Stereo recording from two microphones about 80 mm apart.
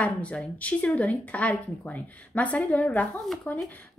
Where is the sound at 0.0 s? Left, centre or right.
Centre.